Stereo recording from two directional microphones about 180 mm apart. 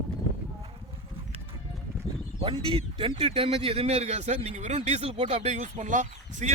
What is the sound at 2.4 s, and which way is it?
Speech, 30° right (ahead or behind).